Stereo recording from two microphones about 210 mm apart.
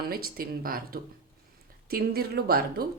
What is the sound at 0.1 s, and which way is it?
Speech, 45° right (ahead or behind).